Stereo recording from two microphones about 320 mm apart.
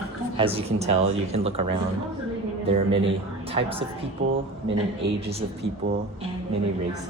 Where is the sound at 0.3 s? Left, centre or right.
Centre.